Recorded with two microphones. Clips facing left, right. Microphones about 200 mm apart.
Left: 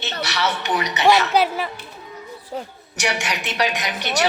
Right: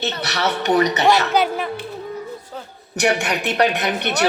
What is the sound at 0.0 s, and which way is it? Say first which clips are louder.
Speech: right 2 dB; 40° right (ahead or behind).